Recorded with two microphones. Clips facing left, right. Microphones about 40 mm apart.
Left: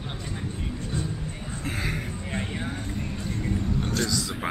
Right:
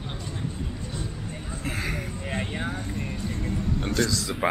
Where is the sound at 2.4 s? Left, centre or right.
Centre.